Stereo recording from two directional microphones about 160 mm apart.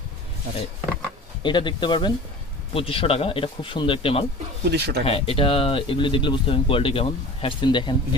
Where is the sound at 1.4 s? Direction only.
30° left (ahead or behind).